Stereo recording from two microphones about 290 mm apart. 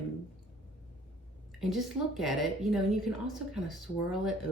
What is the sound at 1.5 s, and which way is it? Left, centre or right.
A woman's voice, centre.